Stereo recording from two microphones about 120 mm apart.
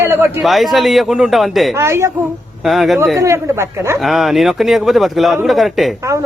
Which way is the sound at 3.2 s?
25° right (ahead or behind).